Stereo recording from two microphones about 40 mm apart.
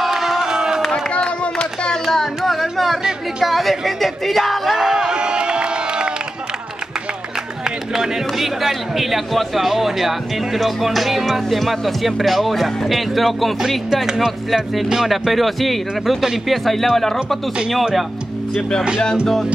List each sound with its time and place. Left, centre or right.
0.0 s crowd: centre
1.4 s a sound: left
2.0 s carnatic music: centre
3.0 s chatter: centre
3.4 s music: centre
4.7 s a sound: centre
7.9 s speech: centre
13.6 s speech: centre